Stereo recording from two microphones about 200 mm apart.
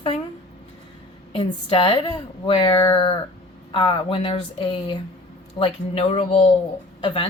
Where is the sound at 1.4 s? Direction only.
25° left (ahead or behind).